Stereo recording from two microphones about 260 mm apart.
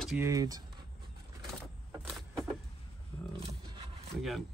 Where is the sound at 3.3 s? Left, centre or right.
Centre.